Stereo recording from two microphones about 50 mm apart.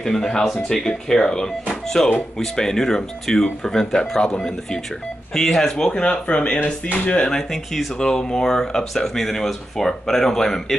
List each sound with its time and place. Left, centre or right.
0.0 s speech: centre
6.2 s speech: left
7.2 s speech: centre